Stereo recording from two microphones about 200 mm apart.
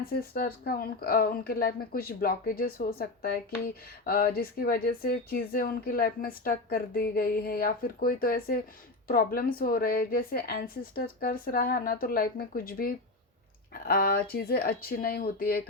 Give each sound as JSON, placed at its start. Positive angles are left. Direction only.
{"t": 0.0, "sound": "speech", "side_deg": 50}